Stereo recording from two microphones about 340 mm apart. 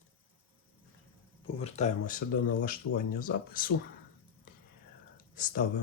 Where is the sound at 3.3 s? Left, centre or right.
Left.